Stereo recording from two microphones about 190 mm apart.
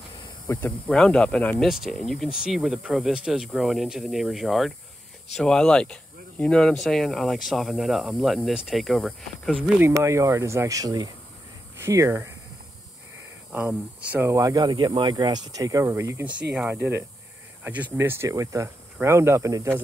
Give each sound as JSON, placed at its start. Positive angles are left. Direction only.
{"t": 0.6, "sound": "speech", "side_deg": 5}
{"t": 9.8, "sound": "speech", "side_deg": -15}
{"t": 13.5, "sound": "speech", "side_deg": -10}